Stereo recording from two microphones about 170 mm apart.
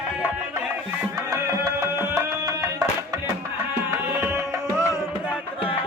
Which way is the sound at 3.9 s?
10° right (ahead or behind).